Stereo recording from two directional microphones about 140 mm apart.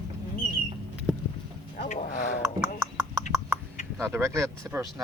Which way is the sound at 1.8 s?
65° left (ahead or behind).